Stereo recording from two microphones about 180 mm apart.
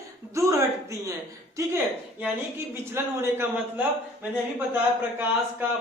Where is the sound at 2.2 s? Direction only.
10° right (ahead or behind).